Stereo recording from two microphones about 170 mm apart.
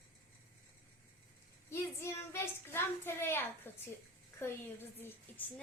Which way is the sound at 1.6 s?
15° left (ahead or behind).